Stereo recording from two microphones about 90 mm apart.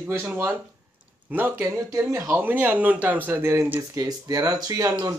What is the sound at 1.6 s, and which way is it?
Speech, 30° right (ahead or behind).